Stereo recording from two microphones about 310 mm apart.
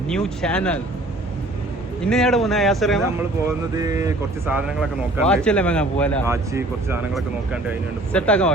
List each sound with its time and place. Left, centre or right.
0.1 s speech: centre
2.0 s speech: centre
6.2 s speech: centre